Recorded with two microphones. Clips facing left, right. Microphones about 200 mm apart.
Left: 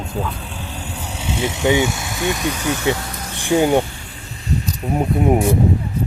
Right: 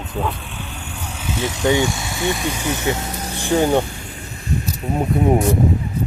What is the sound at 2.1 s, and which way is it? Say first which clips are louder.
Speech: left 1 dB; 15° right (ahead or behind).